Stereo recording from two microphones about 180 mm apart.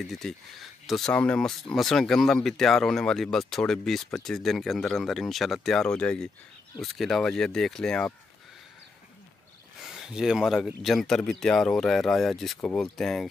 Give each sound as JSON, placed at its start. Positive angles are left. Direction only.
{"t": 0.0, "sound": "speech", "side_deg": 0}
{"t": 9.8, "sound": "speech", "side_deg": -5}